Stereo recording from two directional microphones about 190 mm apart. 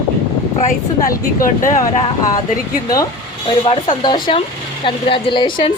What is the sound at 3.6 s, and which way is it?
Speech, 25° left (ahead or behind).